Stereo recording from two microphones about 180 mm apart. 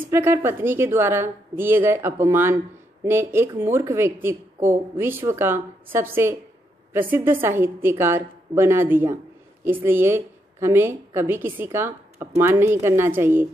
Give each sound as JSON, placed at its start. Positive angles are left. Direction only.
{"t": 0.1, "sound": "a woman's voice", "side_deg": -15}